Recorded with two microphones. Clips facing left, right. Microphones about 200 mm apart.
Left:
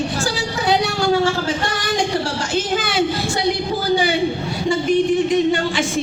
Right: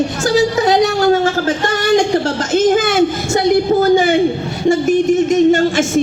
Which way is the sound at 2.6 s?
50° right (ahead or behind).